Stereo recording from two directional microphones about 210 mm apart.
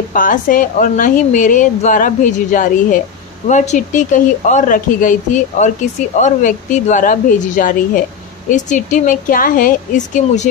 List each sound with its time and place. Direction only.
0.1 s a woman's voice: 40° left (ahead or behind)